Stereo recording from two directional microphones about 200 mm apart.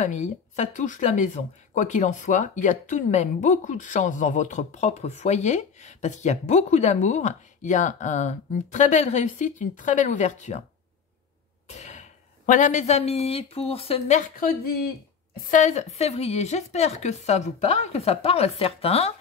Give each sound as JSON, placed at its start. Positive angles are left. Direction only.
{"t": 0.0, "sound": "speech", "side_deg": 35}
{"t": 11.7, "sound": "speech", "side_deg": 35}
{"t": 15.5, "sound": "speech", "side_deg": 35}